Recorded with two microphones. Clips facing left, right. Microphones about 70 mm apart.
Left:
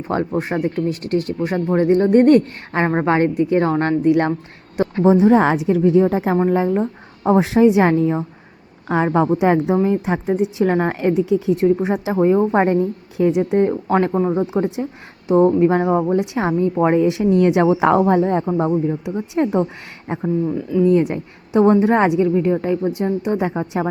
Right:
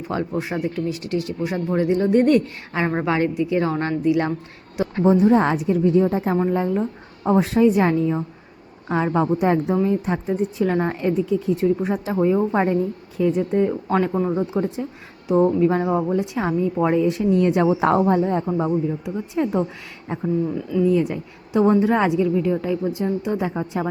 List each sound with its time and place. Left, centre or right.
0.1 s speech: left
5.0 s speech: left
8.9 s a woman's voice: left
10.6 s speech: left
10.9 s speech: left
12.5 s a woman's voice: left
14.2 s speech: left
14.5 s a woman's voice: left
15.3 s a woman's voice: left
16.1 s a woman's voice: left
17.0 s a woman's voice: left